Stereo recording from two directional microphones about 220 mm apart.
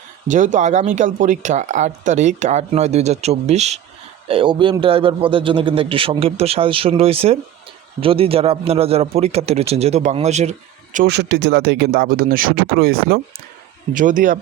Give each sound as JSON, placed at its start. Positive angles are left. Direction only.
{"t": 0.3, "sound": "a man's voice", "side_deg": -35}
{"t": 10.9, "sound": "speech", "side_deg": -45}